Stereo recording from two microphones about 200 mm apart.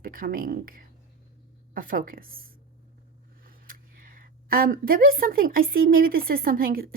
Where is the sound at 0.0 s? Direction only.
45° right (ahead or behind).